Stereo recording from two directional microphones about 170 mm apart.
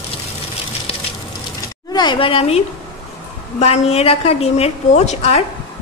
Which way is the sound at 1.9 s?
30° left (ahead or behind).